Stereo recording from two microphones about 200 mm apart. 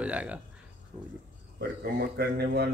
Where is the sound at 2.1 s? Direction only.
55° right (ahead or behind).